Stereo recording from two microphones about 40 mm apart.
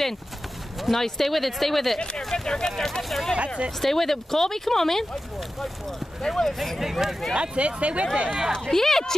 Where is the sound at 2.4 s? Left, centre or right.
Centre.